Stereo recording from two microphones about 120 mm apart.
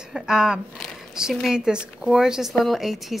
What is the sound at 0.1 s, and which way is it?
Speech, 5° right (ahead or behind).